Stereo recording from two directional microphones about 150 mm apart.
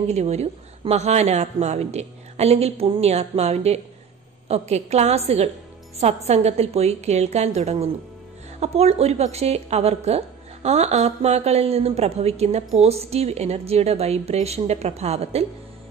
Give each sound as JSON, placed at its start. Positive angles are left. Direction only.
{"t": 0.1, "sound": "a woman's voice", "side_deg": -45}